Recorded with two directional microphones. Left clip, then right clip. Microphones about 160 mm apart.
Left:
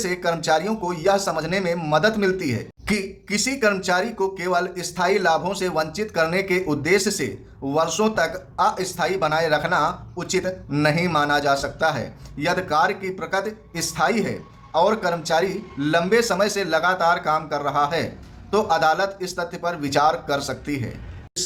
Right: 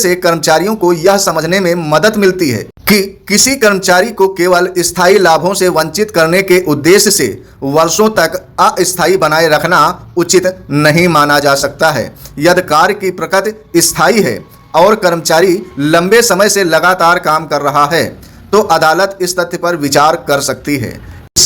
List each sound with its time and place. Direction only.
0.0 s speech: 35° right (ahead or behind)